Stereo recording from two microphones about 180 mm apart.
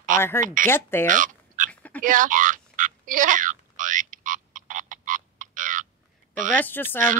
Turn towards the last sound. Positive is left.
turn(degrees=10)  # may be behind; listen again after turning